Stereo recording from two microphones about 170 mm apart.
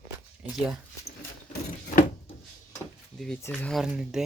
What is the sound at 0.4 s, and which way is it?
Speech, 5° right (ahead or behind).